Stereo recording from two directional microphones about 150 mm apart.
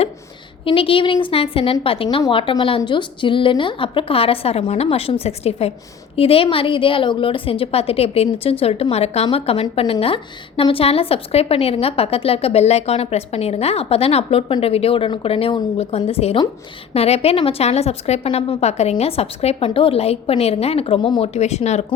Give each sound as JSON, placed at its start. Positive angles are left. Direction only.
{"t": 0.6, "sound": "a woman's voice", "side_deg": 35}
{"t": 18.6, "sound": "a woman's voice", "side_deg": 45}